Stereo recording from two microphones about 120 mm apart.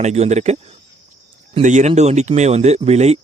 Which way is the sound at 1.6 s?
90° right.